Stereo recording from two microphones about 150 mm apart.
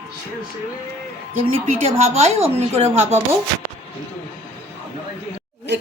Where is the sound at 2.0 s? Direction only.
50° right (ahead or behind).